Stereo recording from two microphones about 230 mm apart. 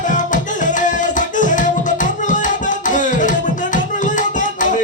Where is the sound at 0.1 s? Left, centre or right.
Left.